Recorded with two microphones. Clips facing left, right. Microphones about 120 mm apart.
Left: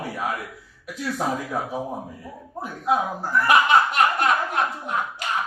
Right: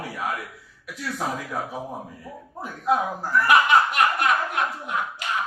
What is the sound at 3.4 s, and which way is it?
Chuckle, 30° left (ahead or behind).